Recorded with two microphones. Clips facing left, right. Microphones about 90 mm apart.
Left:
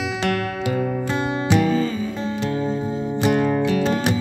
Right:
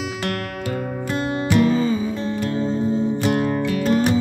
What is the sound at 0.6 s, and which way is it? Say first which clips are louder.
Music: left 3 dB; 20° left (ahead or behind).